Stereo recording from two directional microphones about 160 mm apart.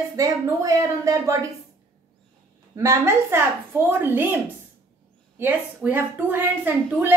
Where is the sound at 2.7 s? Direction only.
20° right (ahead or behind).